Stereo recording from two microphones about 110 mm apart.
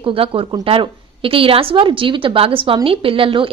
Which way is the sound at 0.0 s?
55° right (ahead or behind).